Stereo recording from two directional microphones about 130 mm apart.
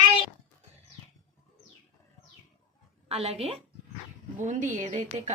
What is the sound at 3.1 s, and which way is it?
Speech, 50° right (ahead or behind).